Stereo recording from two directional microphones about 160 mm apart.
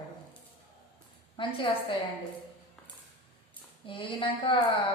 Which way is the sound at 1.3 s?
30° left (ahead or behind).